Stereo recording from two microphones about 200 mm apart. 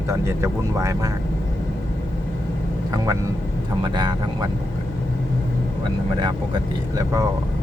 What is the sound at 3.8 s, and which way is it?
Speech, 20° right (ahead or behind).